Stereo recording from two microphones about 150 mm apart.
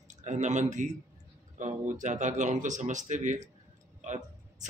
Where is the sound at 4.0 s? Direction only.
55° right (ahead or behind).